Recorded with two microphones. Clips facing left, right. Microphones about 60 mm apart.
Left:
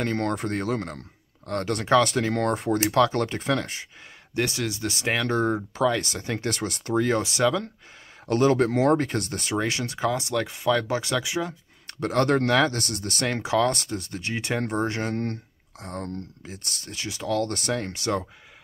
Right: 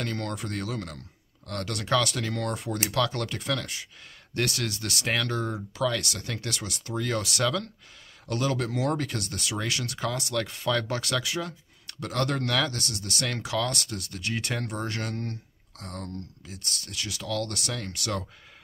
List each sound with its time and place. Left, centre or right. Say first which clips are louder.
0.0 s speech: left 6 dB; left
4.3 s speech: left 3 dB; centre
5.3 s speech: left 7 dB; left
5.9 s speech: left 4 dB; left
7.1 s speech: left 2 dB; left
8.3 s speech: left 8 dB; left
11.9 s speech: left 7 dB; left
13.3 s speech: left 7 dB; left
16.6 s speech: right 3 dB; right
16.9 s speech: left 5 dB; left